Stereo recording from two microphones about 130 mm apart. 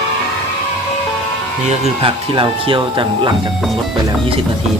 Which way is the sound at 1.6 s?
55° right (ahead or behind).